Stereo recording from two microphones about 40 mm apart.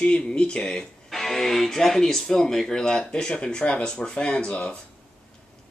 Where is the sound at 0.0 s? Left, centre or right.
Left.